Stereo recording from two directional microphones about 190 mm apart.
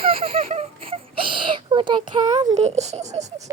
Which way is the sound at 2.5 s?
35° right (ahead or behind).